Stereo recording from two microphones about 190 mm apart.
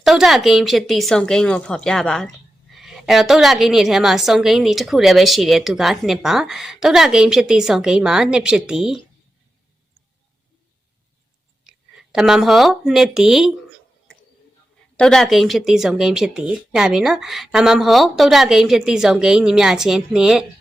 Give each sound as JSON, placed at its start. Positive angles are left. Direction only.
{"t": 0.0, "sound": "a woman's voice", "side_deg": 0}
{"t": 11.7, "sound": "a sound", "side_deg": -5}
{"t": 12.1, "sound": "a woman's voice", "side_deg": -5}
{"t": 14.9, "sound": "a woman's voice", "side_deg": 5}